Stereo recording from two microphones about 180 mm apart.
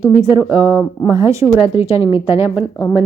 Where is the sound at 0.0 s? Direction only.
15° right (ahead or behind).